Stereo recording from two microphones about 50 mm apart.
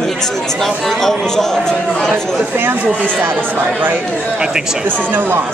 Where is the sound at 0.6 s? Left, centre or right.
Centre.